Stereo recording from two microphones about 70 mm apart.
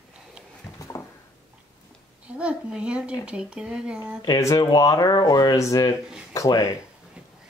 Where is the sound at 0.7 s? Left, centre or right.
Left.